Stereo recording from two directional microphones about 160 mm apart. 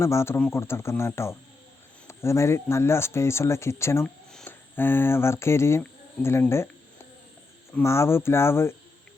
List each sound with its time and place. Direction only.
0.0 s speech: 15° left (ahead or behind)
4.0 s speech: 5° left (ahead or behind)